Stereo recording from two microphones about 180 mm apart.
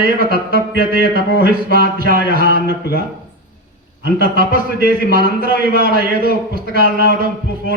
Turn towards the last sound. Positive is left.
turn(degrees=-55)  # may be behind; listen again after turning